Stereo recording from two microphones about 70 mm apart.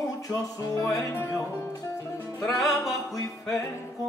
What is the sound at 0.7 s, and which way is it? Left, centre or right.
Music, left.